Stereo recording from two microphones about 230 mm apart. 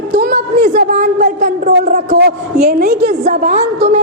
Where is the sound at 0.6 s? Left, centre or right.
Right.